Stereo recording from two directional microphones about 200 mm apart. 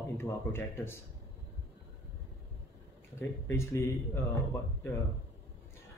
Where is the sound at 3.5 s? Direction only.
15° left (ahead or behind).